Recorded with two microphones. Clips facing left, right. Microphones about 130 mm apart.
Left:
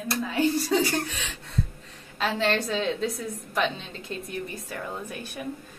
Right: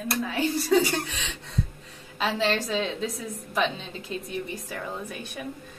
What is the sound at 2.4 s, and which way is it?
A woman's voice, centre (ahead or behind).